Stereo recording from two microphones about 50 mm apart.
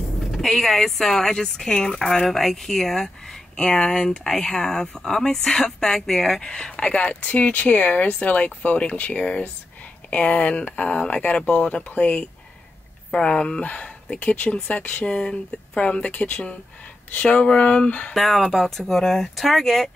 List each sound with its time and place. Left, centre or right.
0.3 s speech: centre
6.5 s speech: centre
13.1 s speech: centre
15.1 s speech: centre
18.1 s speech: centre